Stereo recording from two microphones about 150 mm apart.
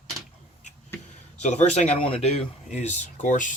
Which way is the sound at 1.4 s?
50° left (ahead or behind).